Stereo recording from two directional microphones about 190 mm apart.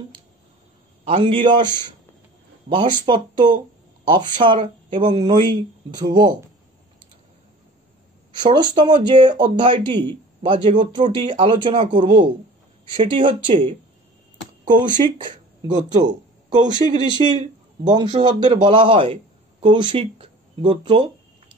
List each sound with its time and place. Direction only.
1.0 s speech: 30° right (ahead or behind)
8.3 s speech: 25° right (ahead or behind)
15.7 s speech: 40° right (ahead or behind)
16.1 s speech: 20° right (ahead or behind)